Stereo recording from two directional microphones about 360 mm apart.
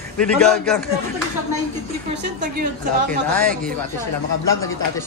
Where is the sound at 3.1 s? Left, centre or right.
Right.